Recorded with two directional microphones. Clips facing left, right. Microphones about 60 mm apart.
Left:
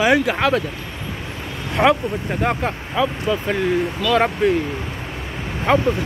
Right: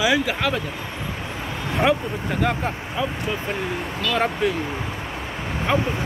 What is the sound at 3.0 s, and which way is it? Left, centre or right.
Speech, left.